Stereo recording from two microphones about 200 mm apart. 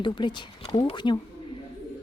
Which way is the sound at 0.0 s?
25° left (ahead or behind).